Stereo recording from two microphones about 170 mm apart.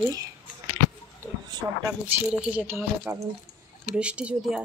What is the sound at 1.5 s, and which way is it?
Speech, 25° right (ahead or behind).